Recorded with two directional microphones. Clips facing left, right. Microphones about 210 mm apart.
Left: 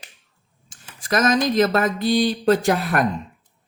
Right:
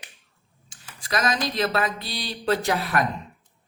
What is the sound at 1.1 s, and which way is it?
Speech, 45° left (ahead or behind).